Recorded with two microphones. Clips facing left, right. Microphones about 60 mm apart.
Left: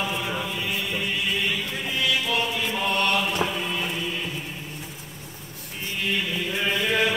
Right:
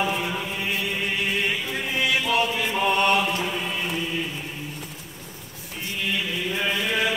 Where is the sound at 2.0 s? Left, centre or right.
Right.